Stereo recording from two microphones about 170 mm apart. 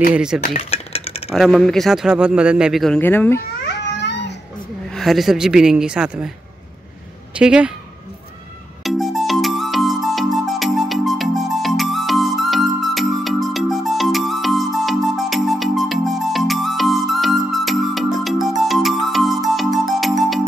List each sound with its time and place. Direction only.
0.1 s speech: 5° right (ahead or behind)
0.5 s a sound: 35° left (ahead or behind)
1.3 s speech: centre (ahead or behind)
3.0 s speech: 10° left (ahead or behind)
3.6 s a sound: 90° left
4.9 s speech: centre (ahead or behind)
7.3 s speech: 5° right (ahead or behind)
8.8 s music: centre (ahead or behind)